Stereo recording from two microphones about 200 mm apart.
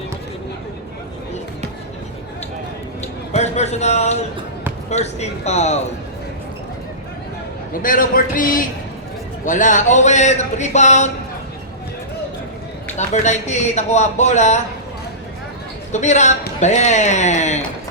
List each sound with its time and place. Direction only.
3.3 s a man's voice: 35° left (ahead or behind)
7.7 s a man's voice: 45° left (ahead or behind)
13.0 s a man's voice: 35° left (ahead or behind)
15.9 s a man's voice: 35° left (ahead or behind)